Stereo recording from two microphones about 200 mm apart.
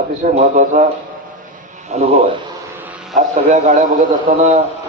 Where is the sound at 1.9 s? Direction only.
35° right (ahead or behind).